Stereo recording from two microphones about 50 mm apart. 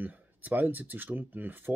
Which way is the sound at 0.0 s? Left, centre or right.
Right.